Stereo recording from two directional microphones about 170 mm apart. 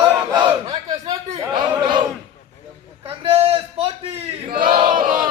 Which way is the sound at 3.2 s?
35° right (ahead or behind).